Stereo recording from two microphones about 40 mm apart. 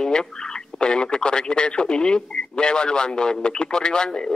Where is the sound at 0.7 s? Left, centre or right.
Left.